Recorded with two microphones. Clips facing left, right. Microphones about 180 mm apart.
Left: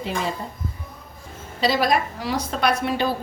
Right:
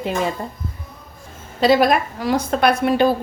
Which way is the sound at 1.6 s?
55° right (ahead or behind).